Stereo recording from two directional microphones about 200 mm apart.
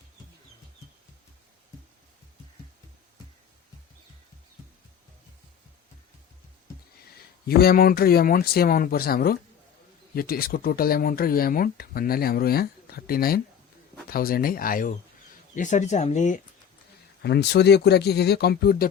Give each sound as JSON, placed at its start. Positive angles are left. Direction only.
{"t": 7.4, "sound": "speech", "side_deg": 50}
{"t": 17.2, "sound": "speech", "side_deg": 55}